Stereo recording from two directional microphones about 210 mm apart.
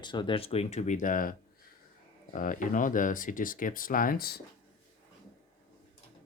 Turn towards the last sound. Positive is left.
turn(degrees=45)  # may be behind; listen again after turning